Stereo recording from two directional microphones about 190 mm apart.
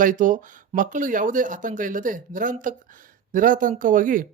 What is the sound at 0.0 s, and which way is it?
Speech, 45° right (ahead or behind).